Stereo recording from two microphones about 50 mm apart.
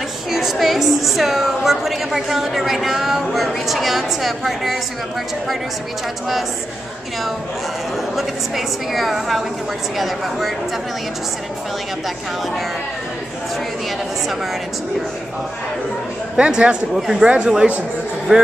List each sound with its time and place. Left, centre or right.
0.3 s a woman's voice: centre
8.2 s a woman's voice: centre
16.3 s a man's voice: right
16.9 s a man's voice: centre